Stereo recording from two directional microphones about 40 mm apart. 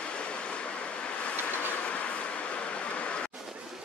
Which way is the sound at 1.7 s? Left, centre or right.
Left.